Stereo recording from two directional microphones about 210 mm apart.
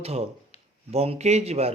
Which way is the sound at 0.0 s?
30° right (ahead or behind).